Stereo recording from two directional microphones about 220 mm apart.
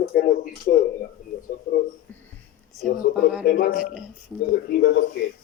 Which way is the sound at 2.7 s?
Centre (ahead or behind).